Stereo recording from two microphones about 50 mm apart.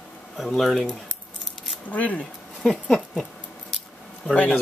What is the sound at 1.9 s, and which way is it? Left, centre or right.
Speech, left.